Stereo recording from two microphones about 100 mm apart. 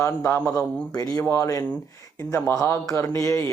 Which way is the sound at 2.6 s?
25° left (ahead or behind).